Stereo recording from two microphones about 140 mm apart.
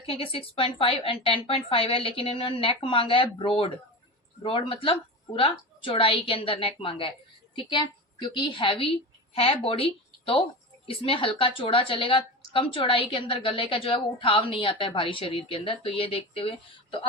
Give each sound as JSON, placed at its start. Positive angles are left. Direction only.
{"t": 0.0, "sound": "a woman's voice", "side_deg": 40}